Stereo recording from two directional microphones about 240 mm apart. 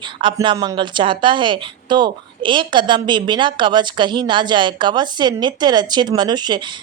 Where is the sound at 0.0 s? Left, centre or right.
Centre.